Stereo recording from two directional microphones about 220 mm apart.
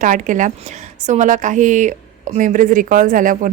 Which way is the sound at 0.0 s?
35° right (ahead or behind).